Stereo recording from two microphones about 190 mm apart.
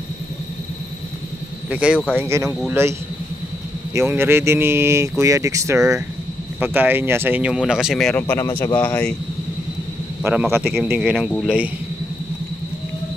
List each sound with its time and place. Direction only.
1.7 s speech: 5° right (ahead or behind)
3.9 s speech: 15° right (ahead or behind); by 9.1 s 5° left (ahead or behind)
10.5 s speech: 5° right (ahead or behind)